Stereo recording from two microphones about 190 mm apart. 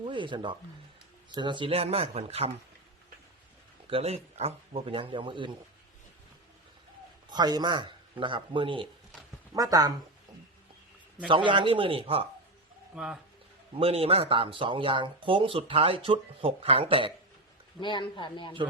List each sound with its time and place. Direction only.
0.0 s speech: 25° right (ahead or behind)
3.8 s speech: 30° right (ahead or behind)
7.3 s speech: 20° right (ahead or behind)
11.3 s speech: 25° right (ahead or behind)
13.7 s speech: 30° right (ahead or behind)
17.7 s a man's voice: 25° left (ahead or behind)